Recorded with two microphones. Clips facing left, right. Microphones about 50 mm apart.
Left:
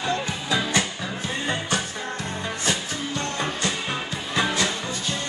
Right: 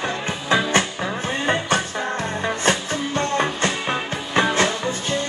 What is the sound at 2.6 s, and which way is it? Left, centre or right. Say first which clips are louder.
Music: right 5 dB; right.